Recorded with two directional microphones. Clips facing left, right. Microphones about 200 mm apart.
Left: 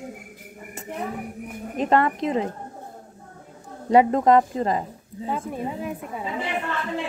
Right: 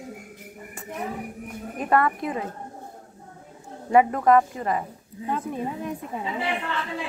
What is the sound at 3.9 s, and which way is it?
Speech, 25° left (ahead or behind).